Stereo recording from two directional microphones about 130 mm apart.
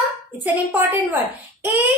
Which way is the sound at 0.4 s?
15° right (ahead or behind).